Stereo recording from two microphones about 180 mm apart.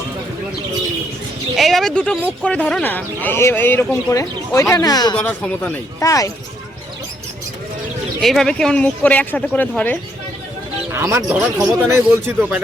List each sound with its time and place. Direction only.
1.5 s speech: centre (ahead or behind); by 5.1 s 20° left (ahead or behind)
5.1 s speech: 10° left (ahead or behind)
8.2 s speech: centre (ahead or behind)
10.9 s speech: 15° right (ahead or behind)